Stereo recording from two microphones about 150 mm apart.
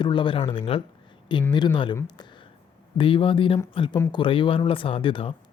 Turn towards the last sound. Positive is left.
turn(degrees=35)  # may be behind; listen again after turning